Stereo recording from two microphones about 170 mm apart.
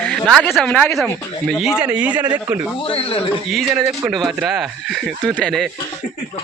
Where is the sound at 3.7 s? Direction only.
15° right (ahead or behind).